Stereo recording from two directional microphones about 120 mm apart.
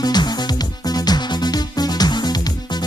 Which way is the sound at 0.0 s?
35° left (ahead or behind).